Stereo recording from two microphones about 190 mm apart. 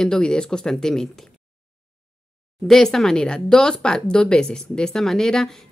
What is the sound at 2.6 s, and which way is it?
Speech, centre (ahead or behind).